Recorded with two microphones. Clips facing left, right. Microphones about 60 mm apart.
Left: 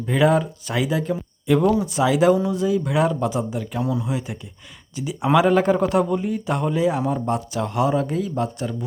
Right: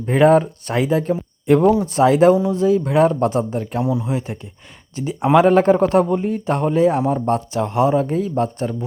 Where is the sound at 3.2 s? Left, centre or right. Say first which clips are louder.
Right 5 dB; right.